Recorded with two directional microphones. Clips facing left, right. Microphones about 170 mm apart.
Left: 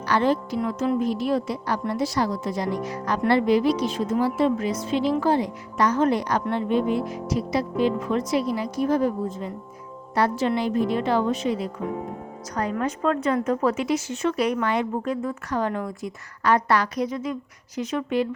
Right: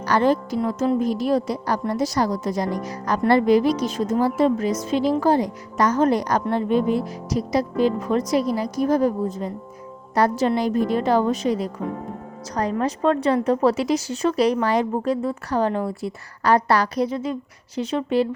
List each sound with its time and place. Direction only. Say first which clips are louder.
0.0 s speech: right 3 dB; 45° right (ahead or behind)
12.7 s a woman's voice: right 4 dB; 30° right (ahead or behind)